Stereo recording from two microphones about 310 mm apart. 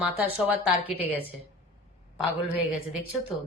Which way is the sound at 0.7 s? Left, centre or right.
Centre.